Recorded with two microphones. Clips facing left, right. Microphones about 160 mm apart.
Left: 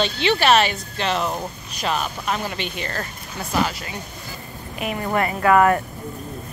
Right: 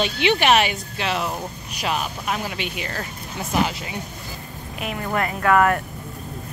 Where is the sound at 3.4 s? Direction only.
20° right (ahead or behind).